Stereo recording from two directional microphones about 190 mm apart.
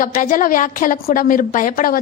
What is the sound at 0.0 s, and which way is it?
A woman's voice, 45° left (ahead or behind).